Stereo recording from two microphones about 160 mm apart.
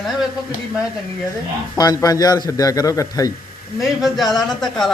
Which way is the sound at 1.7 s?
25° left (ahead or behind).